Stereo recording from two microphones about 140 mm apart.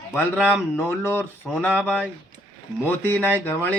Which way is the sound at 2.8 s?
15° left (ahead or behind).